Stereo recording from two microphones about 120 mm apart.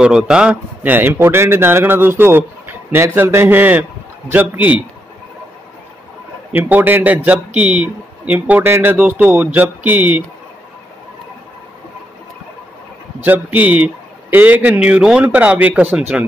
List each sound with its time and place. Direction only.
0.0 s a man's voice: 5° right (ahead or behind)
6.5 s a man's voice: 15° right (ahead or behind)
13.2 s a man's voice: 15° right (ahead or behind)